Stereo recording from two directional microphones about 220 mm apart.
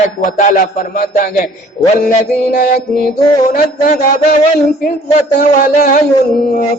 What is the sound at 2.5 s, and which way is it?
A man's voice, 40° left (ahead or behind).